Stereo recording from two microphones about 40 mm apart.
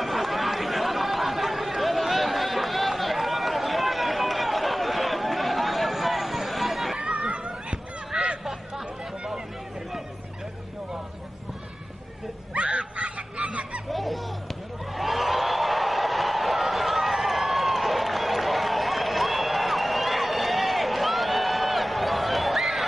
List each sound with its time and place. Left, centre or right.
0.0 s chatter: centre
7.0 s a sound: right
8.5 s chatter: centre
12.5 s fowl: right
13.9 s music: centre
15.0 s a sound: centre